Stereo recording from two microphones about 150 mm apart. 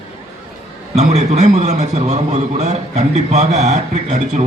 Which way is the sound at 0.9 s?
50° right (ahead or behind).